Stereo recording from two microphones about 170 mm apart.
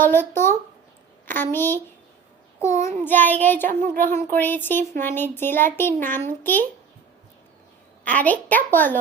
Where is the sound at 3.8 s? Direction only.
50° right (ahead or behind).